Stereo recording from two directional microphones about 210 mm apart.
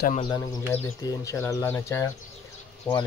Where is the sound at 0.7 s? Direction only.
15° left (ahead or behind).